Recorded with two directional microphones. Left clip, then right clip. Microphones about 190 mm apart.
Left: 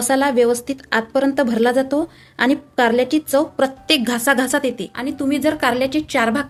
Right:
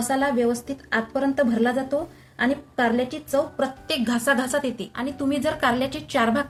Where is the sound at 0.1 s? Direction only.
50° left (ahead or behind).